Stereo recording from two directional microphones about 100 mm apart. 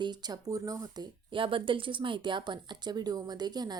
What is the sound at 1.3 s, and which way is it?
A woman's voice, 60° right (ahead or behind).